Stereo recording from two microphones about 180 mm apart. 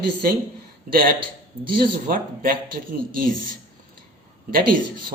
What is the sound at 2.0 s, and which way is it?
A man's voice, 50° right (ahead or behind).